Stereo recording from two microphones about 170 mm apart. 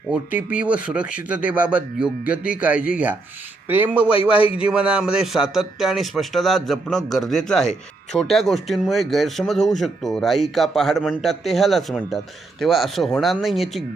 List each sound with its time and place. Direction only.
0.1 s speech: 10° right (ahead or behind)
4.1 s a man's voice: 30° left (ahead or behind)
4.5 s a man's voice: 5° right (ahead or behind)